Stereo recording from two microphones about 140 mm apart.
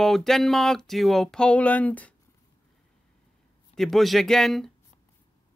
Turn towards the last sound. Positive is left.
turn(degrees=0)  # may be behind; listen again after turning